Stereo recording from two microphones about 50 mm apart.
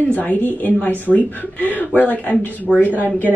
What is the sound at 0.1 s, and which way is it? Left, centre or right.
Speech, left.